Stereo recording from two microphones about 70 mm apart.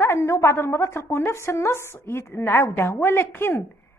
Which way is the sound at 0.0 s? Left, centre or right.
Left.